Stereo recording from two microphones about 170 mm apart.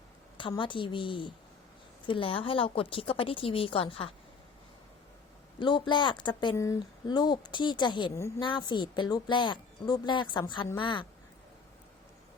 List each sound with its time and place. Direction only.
0.3 s a woman's voice: 30° left (ahead or behind)
5.5 s a woman's voice: 25° left (ahead or behind)